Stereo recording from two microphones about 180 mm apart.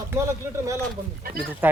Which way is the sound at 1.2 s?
55° right (ahead or behind).